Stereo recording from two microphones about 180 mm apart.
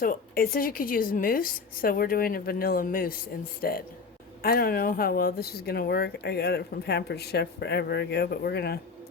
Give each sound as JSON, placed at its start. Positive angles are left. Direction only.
{"t": 0.0, "sound": "a woman's voice", "side_deg": 55}